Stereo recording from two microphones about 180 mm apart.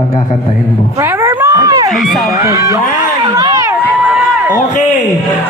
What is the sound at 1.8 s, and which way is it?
Speech, centre (ahead or behind).